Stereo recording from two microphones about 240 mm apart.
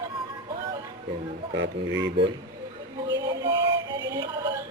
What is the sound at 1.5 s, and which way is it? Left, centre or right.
Speech, right.